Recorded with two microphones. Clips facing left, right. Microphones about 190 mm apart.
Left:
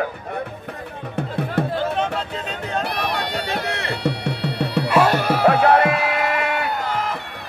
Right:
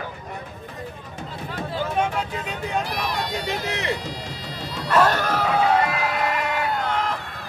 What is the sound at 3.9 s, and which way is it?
Music, 65° left (ahead or behind).